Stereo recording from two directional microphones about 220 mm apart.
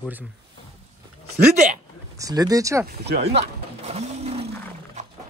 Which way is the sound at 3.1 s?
30° right (ahead or behind).